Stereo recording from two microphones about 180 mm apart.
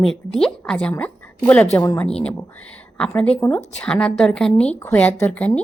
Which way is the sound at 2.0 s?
5° left (ahead or behind).